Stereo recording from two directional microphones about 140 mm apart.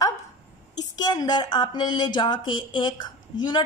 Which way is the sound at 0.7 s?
30° left (ahead or behind).